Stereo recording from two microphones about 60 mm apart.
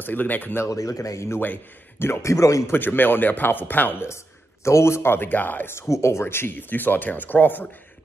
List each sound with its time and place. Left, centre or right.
0.0 s speech: left
0.7 s speech: left
1.4 s speech: left
2.0 s speech: left
2.7 s speech: left
4.6 s speech: left
5.9 s speech: left